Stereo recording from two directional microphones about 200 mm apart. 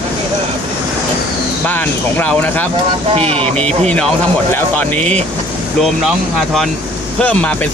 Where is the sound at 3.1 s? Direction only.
30° right (ahead or behind).